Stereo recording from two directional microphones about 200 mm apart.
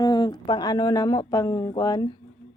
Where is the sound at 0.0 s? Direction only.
20° left (ahead or behind).